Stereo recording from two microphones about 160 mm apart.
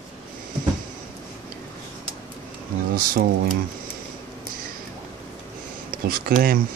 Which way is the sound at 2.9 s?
65° right (ahead or behind).